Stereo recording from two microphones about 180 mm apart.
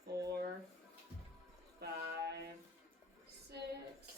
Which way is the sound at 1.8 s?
65° right (ahead or behind).